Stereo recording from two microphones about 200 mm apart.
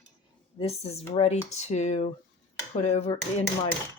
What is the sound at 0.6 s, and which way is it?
Speech, 30° left (ahead or behind).